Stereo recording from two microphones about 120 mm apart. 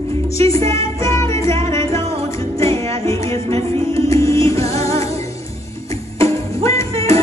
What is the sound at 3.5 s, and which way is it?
Music, 25° left (ahead or behind).